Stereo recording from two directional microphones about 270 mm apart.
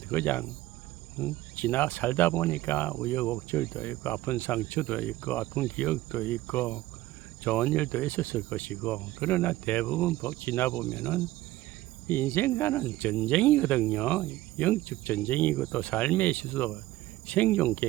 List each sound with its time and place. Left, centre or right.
0.1 s speech: centre